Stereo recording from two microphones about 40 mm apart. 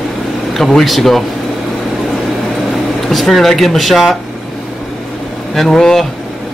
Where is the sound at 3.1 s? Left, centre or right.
Centre.